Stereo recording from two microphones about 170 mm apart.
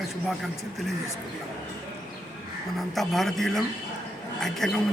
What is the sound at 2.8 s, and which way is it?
A woman's voice, centre (ahead or behind).